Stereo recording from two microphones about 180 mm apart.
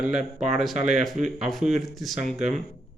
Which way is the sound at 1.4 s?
Centre (ahead or behind).